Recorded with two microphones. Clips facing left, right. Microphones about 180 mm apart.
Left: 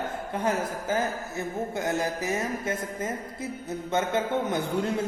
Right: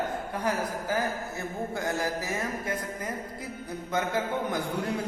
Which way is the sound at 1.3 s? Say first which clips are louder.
Left 3 dB; 20° left (ahead or behind).